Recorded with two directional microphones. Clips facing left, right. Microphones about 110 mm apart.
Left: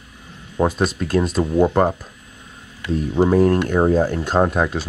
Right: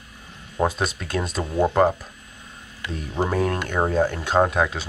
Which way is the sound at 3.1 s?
5° left (ahead or behind).